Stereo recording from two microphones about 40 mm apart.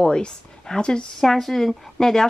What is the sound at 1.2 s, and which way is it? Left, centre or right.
Speech, centre.